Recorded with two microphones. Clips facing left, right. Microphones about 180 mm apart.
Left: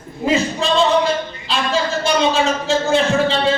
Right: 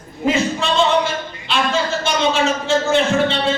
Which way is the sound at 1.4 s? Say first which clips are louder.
Right 1 dB; 35° left (ahead or behind).